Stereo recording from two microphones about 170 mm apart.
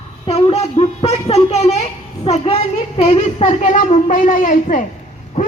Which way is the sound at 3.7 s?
50° left (ahead or behind).